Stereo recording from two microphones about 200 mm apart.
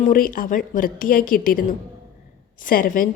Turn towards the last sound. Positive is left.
turn(degrees=45)  # may be behind; listen again after turning